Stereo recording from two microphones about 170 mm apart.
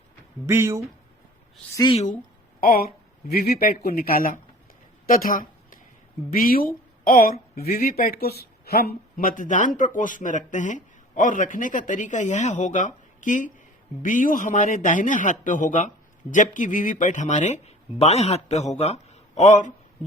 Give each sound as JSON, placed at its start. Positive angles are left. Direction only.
{"t": 0.4, "sound": "speech", "side_deg": -15}
{"t": 1.9, "sound": "a man's voice", "side_deg": 40}
{"t": 2.6, "sound": "speech", "side_deg": 60}
{"t": 5.0, "sound": "a sound", "side_deg": 55}
{"t": 6.3, "sound": "a woman's voice", "side_deg": 55}